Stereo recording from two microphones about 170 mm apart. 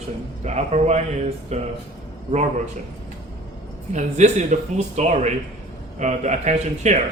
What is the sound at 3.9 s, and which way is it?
Speech, 45° right (ahead or behind).